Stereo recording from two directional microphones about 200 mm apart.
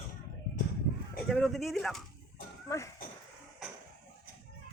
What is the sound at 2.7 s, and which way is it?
Speech, 15° left (ahead or behind).